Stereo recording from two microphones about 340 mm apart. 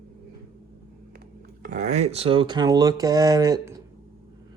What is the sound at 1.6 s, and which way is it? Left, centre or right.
Speech, right.